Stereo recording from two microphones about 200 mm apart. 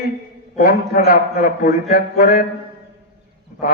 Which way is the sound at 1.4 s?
45° left (ahead or behind).